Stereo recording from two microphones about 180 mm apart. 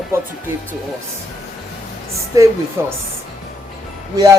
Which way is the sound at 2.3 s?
20° right (ahead or behind).